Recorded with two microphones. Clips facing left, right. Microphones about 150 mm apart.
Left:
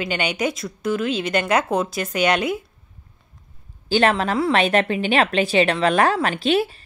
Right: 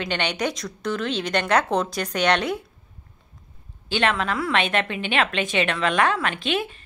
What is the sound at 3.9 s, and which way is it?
A woman's voice, 35° left (ahead or behind).